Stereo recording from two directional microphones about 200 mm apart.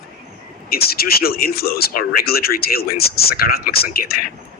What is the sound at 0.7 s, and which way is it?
Speech, 50° left (ahead or behind).